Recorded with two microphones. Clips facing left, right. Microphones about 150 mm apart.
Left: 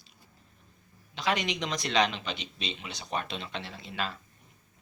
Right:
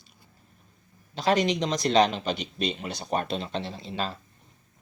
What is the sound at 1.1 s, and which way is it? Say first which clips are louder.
Speech: right 7 dB; 40° right (ahead or behind).